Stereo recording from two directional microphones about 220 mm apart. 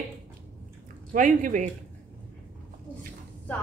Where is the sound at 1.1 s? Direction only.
35° right (ahead or behind).